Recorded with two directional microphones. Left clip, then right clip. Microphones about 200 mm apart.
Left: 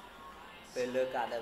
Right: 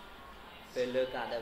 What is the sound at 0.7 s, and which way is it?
Speech, 5° right (ahead or behind).